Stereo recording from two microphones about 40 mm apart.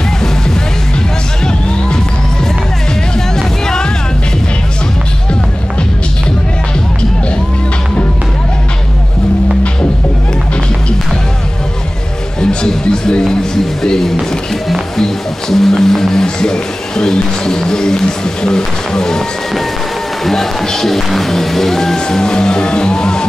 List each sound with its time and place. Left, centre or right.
3.2 s music: centre
12.4 s music: centre
20.2 s music: centre